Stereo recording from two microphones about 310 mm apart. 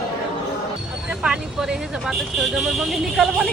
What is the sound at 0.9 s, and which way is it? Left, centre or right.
Speech, centre.